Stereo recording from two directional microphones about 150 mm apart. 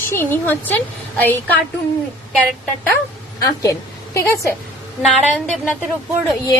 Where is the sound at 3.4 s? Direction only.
25° left (ahead or behind).